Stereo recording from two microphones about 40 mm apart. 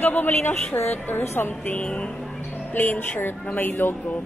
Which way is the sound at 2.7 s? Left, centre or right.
Left.